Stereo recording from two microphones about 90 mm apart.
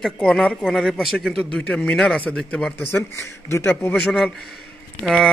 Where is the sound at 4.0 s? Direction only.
5° left (ahead or behind).